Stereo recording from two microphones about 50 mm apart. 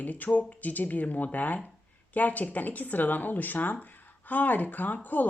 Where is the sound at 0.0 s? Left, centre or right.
Left.